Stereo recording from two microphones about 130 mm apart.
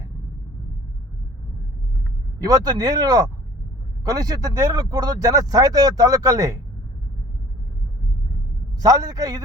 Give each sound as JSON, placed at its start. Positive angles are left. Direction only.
{"t": 2.4, "sound": "speech", "side_deg": -30}
{"t": 8.8, "sound": "speech", "side_deg": -25}